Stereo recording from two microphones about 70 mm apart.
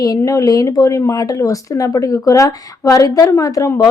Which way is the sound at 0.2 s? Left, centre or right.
Left.